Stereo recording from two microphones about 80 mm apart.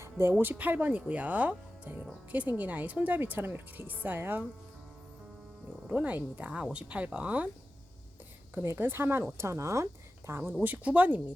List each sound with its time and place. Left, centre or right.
0.0 s speech: right
5.9 s speech: centre
8.5 s a woman's voice: right
10.5 s speech: right